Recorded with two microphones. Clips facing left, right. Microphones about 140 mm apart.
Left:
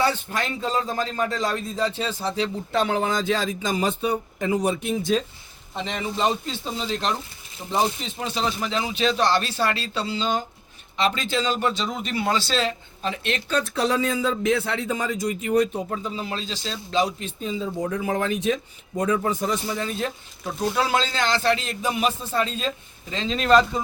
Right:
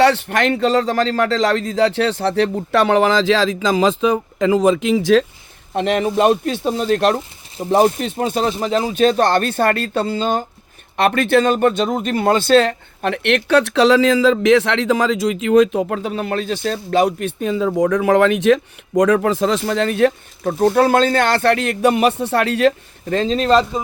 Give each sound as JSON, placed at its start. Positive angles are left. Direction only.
{"t": 0.0, "sound": "speech", "side_deg": -75}
{"t": 5.7, "sound": "speech", "side_deg": -70}
{"t": 8.5, "sound": "speech", "side_deg": -40}
{"t": 10.9, "sound": "speech", "side_deg": -60}
{"t": 23.3, "sound": "speech", "side_deg": -30}